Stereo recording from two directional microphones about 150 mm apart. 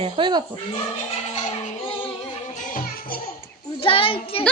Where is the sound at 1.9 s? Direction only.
35° left (ahead or behind).